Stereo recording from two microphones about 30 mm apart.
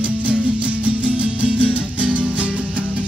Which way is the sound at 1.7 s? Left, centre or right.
Right.